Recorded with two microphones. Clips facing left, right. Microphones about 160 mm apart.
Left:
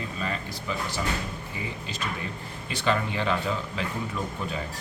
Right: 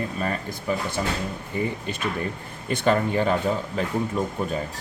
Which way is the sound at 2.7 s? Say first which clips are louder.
Right 6 dB; 45° right (ahead or behind).